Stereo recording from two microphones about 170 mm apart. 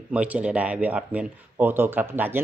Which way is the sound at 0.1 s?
5° right (ahead or behind).